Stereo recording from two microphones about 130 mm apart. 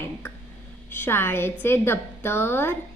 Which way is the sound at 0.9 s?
15° left (ahead or behind).